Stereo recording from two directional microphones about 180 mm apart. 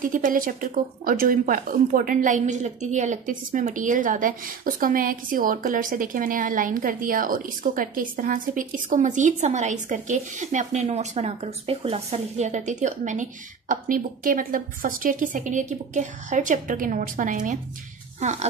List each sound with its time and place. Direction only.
0.1 s speech: 50° right (ahead or behind)